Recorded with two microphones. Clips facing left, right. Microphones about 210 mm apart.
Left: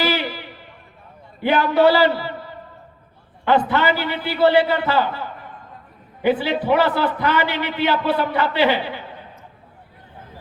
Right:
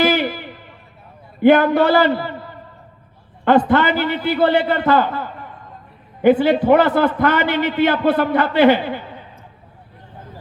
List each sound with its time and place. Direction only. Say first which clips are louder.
0.0 s a sound: right 5 dB; 50° right (ahead or behind)
1.4 s a man's voice: right 4 dB; 50° right (ahead or behind)
3.4 s a man's voice: right 4 dB; 50° right (ahead or behind)
6.2 s a man's voice: right 6 dB; 50° right (ahead or behind)